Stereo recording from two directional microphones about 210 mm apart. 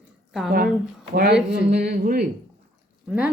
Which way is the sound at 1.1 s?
50° right (ahead or behind).